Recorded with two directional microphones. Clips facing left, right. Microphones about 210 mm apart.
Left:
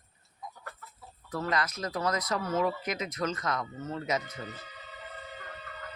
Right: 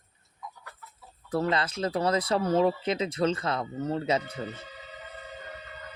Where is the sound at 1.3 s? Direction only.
30° right (ahead or behind).